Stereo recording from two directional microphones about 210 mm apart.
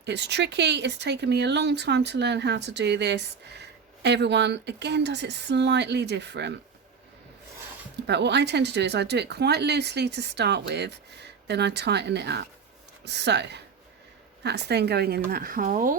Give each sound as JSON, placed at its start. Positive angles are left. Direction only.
{"t": 0.0, "sound": "speech", "side_deg": -55}
{"t": 7.9, "sound": "speech", "side_deg": -55}